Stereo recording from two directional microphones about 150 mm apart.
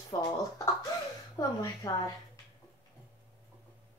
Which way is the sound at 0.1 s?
25° left (ahead or behind).